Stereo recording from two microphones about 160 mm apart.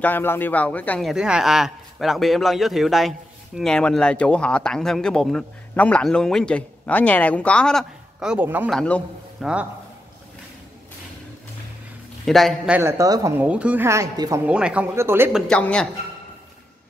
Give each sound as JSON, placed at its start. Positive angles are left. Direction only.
{"t": 0.0, "sound": "a man's voice", "side_deg": 10}
{"t": 1.0, "sound": "a man's voice", "side_deg": -5}
{"t": 8.6, "sound": "a man's voice", "side_deg": 5}
{"t": 9.4, "sound": "a man's voice", "side_deg": -5}
{"t": 12.3, "sound": "a man's voice", "side_deg": 0}
{"t": 12.7, "sound": "a woman's voice", "side_deg": -15}
{"t": 14.4, "sound": "a woman's voice", "side_deg": -5}
{"t": 15.3, "sound": "a man's voice", "side_deg": 5}